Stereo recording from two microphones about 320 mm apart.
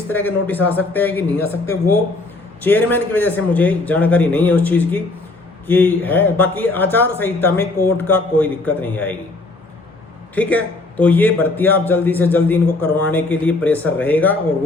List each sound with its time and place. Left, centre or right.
0.1 s a man's voice: centre
2.6 s a man's voice: centre
10.3 s a man's voice: centre